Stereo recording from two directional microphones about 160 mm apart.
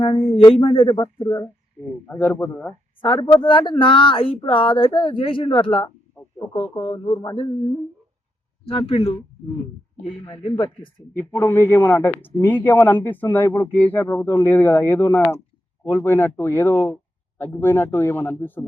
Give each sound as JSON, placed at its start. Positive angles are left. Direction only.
{"t": 0.0, "sound": "speech", "side_deg": 35}
{"t": 1.0, "sound": "speech", "side_deg": 20}
{"t": 3.0, "sound": "speech", "side_deg": 30}
{"t": 10.2, "sound": "speech", "side_deg": 30}
{"t": 11.2, "sound": "speech", "side_deg": 15}